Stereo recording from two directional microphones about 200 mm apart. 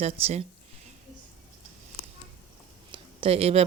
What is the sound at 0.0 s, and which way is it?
Speech, 30° right (ahead or behind).